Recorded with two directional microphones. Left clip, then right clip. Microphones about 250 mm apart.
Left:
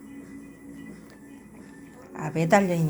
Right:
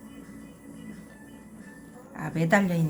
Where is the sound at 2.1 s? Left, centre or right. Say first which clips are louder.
Left 3 dB; centre.